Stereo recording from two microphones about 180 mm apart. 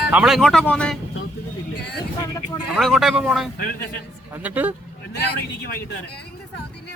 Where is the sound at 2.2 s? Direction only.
15° left (ahead or behind).